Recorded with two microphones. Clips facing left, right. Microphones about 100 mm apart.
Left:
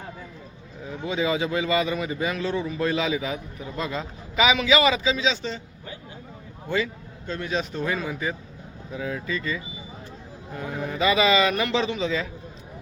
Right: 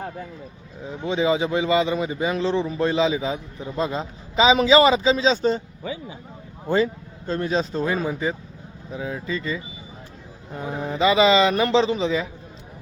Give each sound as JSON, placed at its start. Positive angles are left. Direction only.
{"t": 0.9, "sound": "speech", "side_deg": -25}
{"t": 6.7, "sound": "speech", "side_deg": -35}